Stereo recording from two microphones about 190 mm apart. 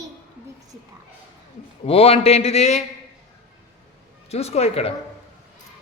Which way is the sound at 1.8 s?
30° left (ahead or behind).